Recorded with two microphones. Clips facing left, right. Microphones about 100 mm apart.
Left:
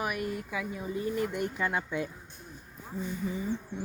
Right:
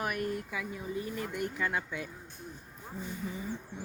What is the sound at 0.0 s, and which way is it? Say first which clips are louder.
Speech: left 1 dB; 10° left (ahead or behind).